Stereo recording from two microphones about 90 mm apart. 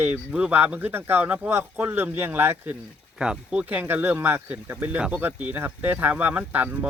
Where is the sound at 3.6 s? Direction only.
20° right (ahead or behind).